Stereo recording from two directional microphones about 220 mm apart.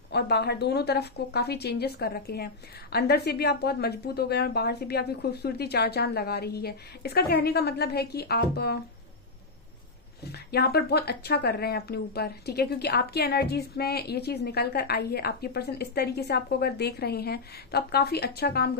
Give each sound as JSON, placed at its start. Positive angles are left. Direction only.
{"t": 0.1, "sound": "a woman's voice", "side_deg": 50}
{"t": 10.2, "sound": "a woman's voice", "side_deg": 45}